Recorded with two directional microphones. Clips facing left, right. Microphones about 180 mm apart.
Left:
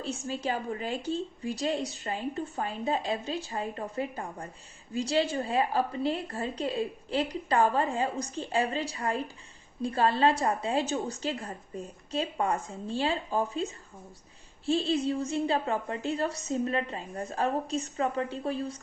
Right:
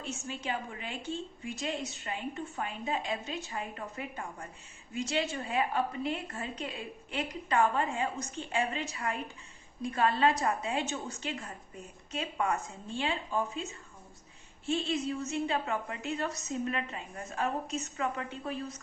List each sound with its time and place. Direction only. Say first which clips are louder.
0.0 s a woman's voice: left 6 dB; 35° left (ahead or behind)